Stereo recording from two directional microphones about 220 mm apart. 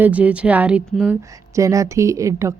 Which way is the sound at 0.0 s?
5° right (ahead or behind).